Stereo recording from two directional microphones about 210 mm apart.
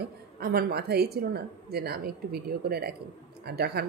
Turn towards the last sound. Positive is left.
turn(degrees=-50)  # may be behind; listen again after turning